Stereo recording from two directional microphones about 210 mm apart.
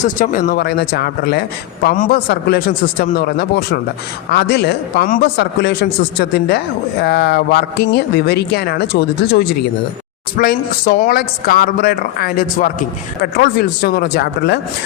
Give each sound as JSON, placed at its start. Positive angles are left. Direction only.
{"t": 0.0, "sound": "a man's voice", "side_deg": 40}
{"t": 10.3, "sound": "a man's voice", "side_deg": 45}